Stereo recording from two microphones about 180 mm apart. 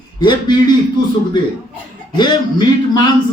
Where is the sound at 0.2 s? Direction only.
25° left (ahead or behind).